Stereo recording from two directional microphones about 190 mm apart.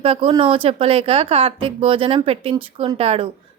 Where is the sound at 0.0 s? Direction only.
30° right (ahead or behind).